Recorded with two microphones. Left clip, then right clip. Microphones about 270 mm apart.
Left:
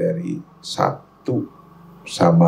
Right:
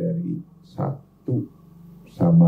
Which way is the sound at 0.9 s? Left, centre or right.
Centre.